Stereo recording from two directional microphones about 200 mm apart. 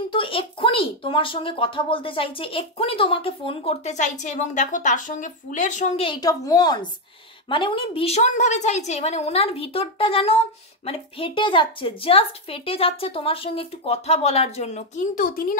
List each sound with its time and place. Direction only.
0.1 s a woman's voice: 25° left (ahead or behind); by 15.5 s 45° left (ahead or behind)